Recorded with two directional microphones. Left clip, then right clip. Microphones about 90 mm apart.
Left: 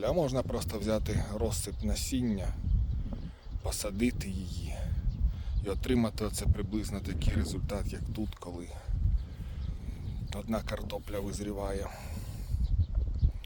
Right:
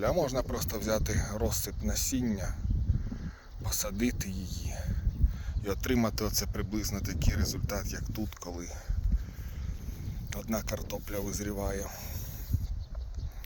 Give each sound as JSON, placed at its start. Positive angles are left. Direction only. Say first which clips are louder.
{"t": 0.0, "sound": "a man's voice", "louder": "right 1 dB", "side_deg": 30}
{"t": 3.6, "sound": "a man's voice", "louder": "even", "side_deg": 35}
{"t": 5.6, "sound": "speech", "louder": "right 1 dB", "side_deg": 15}
{"t": 10.2, "sound": "speech", "louder": "even", "side_deg": 20}